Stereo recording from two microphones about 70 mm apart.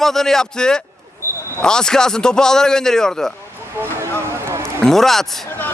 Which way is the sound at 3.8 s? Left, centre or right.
Right.